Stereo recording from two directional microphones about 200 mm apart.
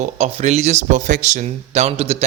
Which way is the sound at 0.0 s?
35° right (ahead or behind).